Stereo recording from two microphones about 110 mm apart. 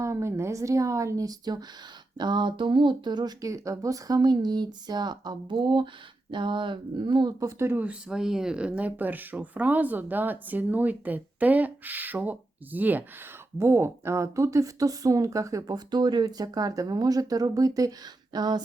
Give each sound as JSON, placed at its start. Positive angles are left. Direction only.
{"t": 0.0, "sound": "a woman's voice", "side_deg": -25}
{"t": 7.3, "sound": "speech", "side_deg": -25}